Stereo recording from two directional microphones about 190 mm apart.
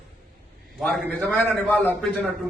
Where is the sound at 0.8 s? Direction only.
5° left (ahead or behind).